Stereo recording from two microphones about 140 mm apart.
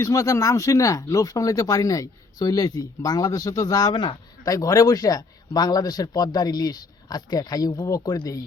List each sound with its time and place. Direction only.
0.0 s speech: 20° left (ahead or behind)